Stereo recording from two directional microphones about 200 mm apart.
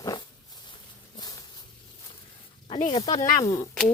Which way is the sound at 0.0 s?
20° left (ahead or behind).